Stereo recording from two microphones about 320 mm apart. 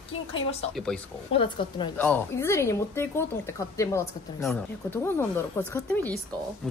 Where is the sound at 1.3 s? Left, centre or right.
Centre.